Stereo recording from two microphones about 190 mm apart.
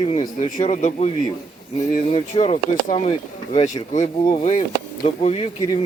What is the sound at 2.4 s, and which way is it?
Speech, 35° left (ahead or behind).